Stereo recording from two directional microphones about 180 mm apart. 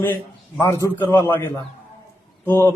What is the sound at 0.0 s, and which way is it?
Speech, 10° left (ahead or behind).